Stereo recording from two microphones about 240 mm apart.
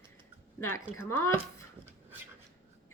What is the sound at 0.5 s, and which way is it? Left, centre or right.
Speech, centre.